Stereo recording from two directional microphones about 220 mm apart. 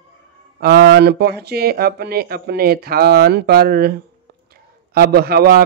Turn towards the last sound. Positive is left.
turn(degrees=-45)  # may be behind; listen again after turning